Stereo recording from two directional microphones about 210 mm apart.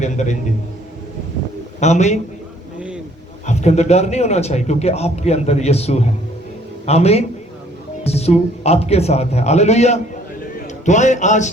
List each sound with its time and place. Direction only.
0.0 s a man's voice: 35° left (ahead or behind)
1.8 s a man's voice: 35° left (ahead or behind)
3.4 s a man's voice: 35° left (ahead or behind)